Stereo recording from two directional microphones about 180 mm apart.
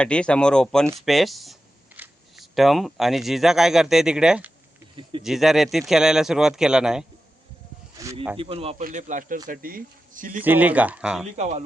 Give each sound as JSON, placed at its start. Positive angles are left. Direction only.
{"t": 0.0, "sound": "speech", "side_deg": 5}
{"t": 8.0, "sound": "snake", "side_deg": -20}
{"t": 8.4, "sound": "speech", "side_deg": -30}
{"t": 8.8, "sound": "speech", "side_deg": -45}
{"t": 10.4, "sound": "speech", "side_deg": -10}
{"t": 11.3, "sound": "speech", "side_deg": -40}